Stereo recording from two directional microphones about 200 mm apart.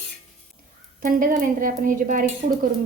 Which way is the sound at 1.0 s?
45° right (ahead or behind).